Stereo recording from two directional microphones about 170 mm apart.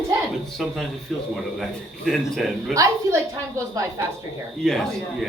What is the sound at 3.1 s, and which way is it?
Speech, 15° right (ahead or behind).